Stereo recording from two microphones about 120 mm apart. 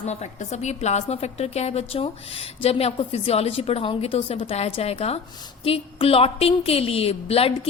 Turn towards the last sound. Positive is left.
turn(degrees=55)  # may be behind; listen again after turning